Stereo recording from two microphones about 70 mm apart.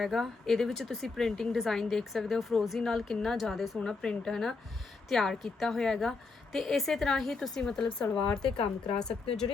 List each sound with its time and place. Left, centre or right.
0.0 s speech: centre
3.8 s speech: centre